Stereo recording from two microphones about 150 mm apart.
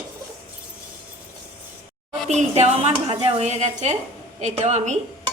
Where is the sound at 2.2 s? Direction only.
50° right (ahead or behind).